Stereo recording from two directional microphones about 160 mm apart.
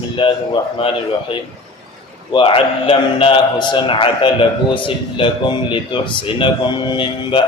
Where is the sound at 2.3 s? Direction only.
35° left (ahead or behind).